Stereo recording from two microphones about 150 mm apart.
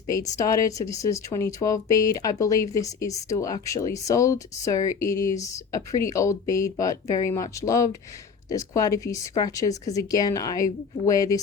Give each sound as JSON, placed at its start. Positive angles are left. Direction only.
{"t": 0.1, "sound": "speech", "side_deg": 25}